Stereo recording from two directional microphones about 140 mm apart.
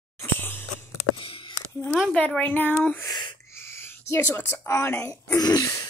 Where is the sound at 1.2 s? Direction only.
40° left (ahead or behind).